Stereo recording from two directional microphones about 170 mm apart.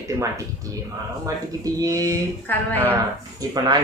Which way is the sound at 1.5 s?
20° right (ahead or behind).